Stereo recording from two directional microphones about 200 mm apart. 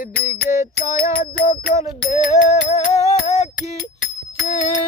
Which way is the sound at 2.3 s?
35° left (ahead or behind).